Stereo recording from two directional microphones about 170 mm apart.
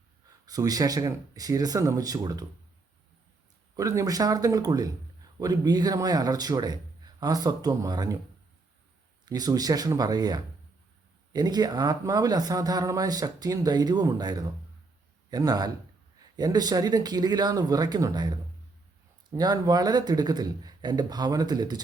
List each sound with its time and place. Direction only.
0.4 s speech: 20° right (ahead or behind)
3.8 s speech: 20° right (ahead or behind)
9.2 s speech: 25° right (ahead or behind)